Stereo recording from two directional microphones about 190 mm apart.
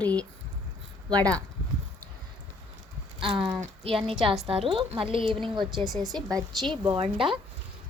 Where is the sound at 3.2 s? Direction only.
25° right (ahead or behind).